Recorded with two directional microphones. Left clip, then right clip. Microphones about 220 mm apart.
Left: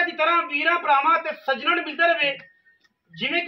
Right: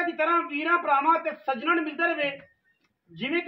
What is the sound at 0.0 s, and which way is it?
A man's voice, 5° left (ahead or behind).